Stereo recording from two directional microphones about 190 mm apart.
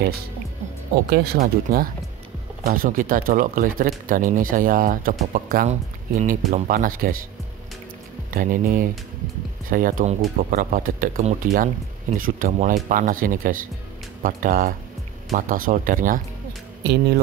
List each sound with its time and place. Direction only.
1.1 s speech: 55° right (ahead or behind)
8.3 s speech: 50° right (ahead or behind)
16.8 s speech: 60° right (ahead or behind)